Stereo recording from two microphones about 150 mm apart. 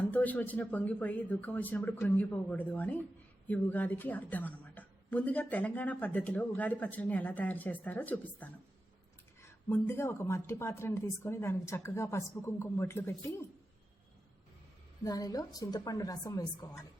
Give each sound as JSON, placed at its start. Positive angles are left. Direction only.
{"t": 0.0, "sound": "a woman's voice", "side_deg": 10}
{"t": 15.0, "sound": "a woman's voice", "side_deg": 25}